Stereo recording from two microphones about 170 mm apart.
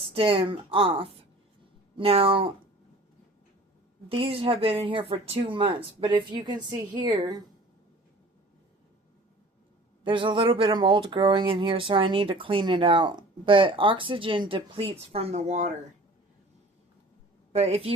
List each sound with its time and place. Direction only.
0.0 s speech: 35° right (ahead or behind)
4.1 s speech: 35° right (ahead or behind)
10.0 s speech: 30° right (ahead or behind)
17.5 s a woman's voice: 35° right (ahead or behind)